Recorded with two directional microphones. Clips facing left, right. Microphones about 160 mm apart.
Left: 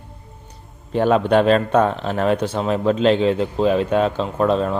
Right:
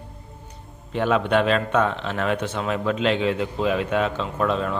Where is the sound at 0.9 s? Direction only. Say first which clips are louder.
Left 5 dB; 35° left (ahead or behind).